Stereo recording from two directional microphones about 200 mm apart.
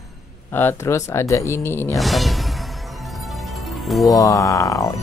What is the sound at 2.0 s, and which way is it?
Music, centre (ahead or behind).